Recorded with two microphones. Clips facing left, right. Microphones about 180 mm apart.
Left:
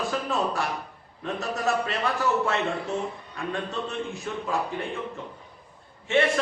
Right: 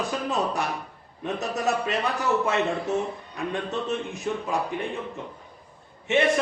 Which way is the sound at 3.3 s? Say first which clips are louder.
Right 2 dB; 20° right (ahead or behind).